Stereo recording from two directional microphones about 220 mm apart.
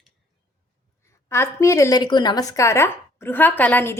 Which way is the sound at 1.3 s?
10° left (ahead or behind).